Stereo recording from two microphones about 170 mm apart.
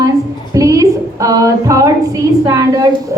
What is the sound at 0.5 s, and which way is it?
A woman's voice, 20° right (ahead or behind).